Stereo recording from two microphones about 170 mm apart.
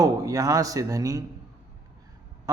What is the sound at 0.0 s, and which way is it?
A man's voice, 20° right (ahead or behind).